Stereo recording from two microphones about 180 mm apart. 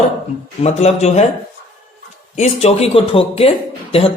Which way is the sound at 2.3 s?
35° left (ahead or behind).